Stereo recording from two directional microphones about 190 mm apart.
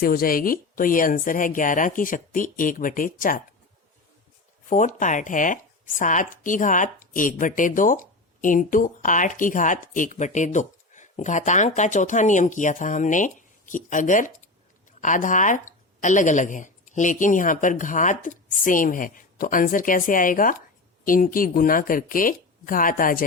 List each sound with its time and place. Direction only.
0.0 s speech: 50° left (ahead or behind)
4.7 s speech: 40° left (ahead or behind)